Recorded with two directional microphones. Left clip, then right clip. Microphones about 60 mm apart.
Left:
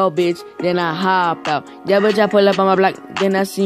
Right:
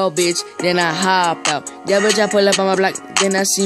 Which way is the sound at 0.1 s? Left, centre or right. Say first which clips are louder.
Even; centre.